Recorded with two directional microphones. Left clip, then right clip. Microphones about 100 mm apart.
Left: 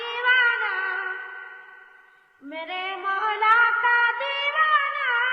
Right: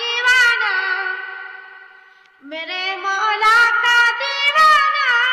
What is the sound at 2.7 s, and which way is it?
Female singing, 20° right (ahead or behind).